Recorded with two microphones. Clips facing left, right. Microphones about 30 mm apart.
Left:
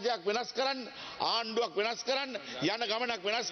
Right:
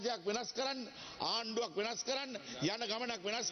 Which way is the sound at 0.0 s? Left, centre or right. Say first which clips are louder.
Left 6 dB; left.